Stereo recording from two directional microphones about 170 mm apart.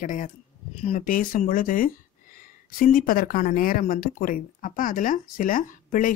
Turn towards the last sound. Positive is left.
turn(degrees=55)  # may be behind; listen again after turning